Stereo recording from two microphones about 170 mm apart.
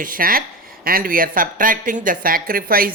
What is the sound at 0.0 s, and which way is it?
Speech, 55° right (ahead or behind).